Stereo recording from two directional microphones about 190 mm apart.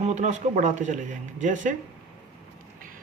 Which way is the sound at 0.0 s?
35° right (ahead or behind).